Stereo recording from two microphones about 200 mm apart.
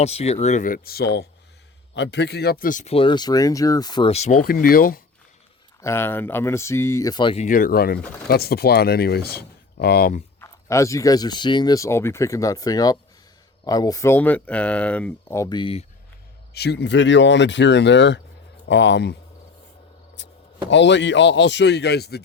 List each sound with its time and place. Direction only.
0.0 s speech: 30° left (ahead or behind); by 5.0 s 45° left (ahead or behind)
5.8 s speech: 10° left (ahead or behind)
7.4 s speech: 45° left (ahead or behind)
10.4 s speech: 15° left (ahead or behind)
16.6 s speech: 55° left (ahead or behind)
20.2 s a sound: 65° left (ahead or behind)
20.7 s speech: 65° left (ahead or behind)